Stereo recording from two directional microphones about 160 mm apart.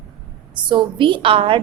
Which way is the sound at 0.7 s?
30° right (ahead or behind).